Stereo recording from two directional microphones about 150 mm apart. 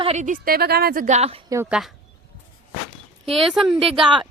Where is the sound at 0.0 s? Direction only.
50° right (ahead or behind); by 1.0 s 90° right.